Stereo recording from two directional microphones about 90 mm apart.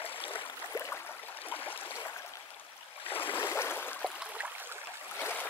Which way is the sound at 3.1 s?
20° left (ahead or behind).